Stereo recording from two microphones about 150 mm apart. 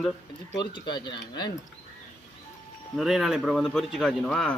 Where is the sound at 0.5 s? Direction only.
30° left (ahead or behind).